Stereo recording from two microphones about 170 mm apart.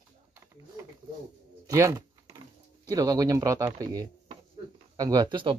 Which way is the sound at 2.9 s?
20° right (ahead or behind).